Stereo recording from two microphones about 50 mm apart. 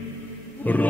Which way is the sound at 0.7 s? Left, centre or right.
Left.